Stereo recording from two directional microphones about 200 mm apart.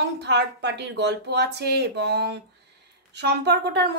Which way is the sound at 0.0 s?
60° right (ahead or behind).